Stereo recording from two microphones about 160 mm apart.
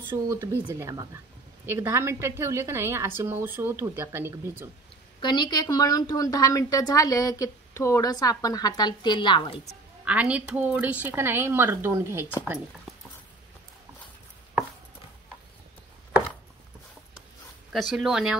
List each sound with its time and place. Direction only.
0.1 s a woman's voice: 15° right (ahead or behind)
5.2 s a woman's voice: 25° left (ahead or behind)
10.0 s a woman's voice: 10° right (ahead or behind)
17.7 s speech: centre (ahead or behind)